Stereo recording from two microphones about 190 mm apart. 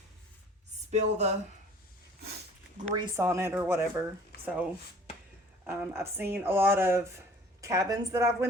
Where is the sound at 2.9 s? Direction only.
20° right (ahead or behind).